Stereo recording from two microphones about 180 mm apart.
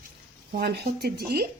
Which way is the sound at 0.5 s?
65° right (ahead or behind).